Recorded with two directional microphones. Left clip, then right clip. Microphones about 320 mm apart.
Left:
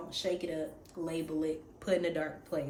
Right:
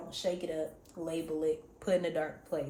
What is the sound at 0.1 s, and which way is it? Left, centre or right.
Speech, centre.